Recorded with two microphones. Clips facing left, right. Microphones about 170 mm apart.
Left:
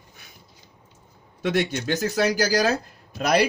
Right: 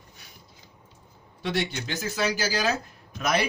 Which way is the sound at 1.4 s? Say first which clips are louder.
Left 5 dB; 50° left (ahead or behind).